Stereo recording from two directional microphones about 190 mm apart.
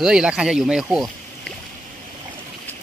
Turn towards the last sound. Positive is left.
turn(degrees=-5)  # may be behind; listen again after turning